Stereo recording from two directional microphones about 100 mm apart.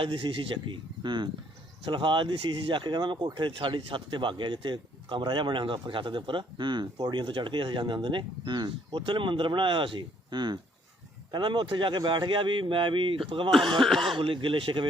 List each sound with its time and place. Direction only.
0.0 s a man's voice: 60° right (ahead or behind)
13.5 s speech: centre (ahead or behind)
14.2 s a man's voice: 60° right (ahead or behind)